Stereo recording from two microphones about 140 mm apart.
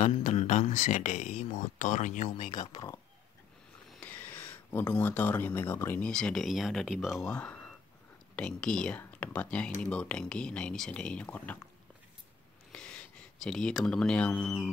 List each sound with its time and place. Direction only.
0.0 s speech: 55° left (ahead or behind)
2.6 s speech: 30° left (ahead or behind)
4.0 s speech: 10° left (ahead or behind)
12.7 s speech: 5° left (ahead or behind)